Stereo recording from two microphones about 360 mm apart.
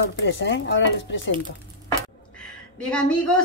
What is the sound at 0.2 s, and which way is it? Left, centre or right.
Speech, left.